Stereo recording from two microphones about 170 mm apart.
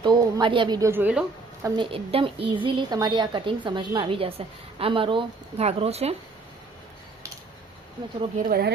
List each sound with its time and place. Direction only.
0.0 s speech: 25° right (ahead or behind)
1.6 s a woman's voice: 25° right (ahead or behind)
8.4 s speech: 65° right (ahead or behind)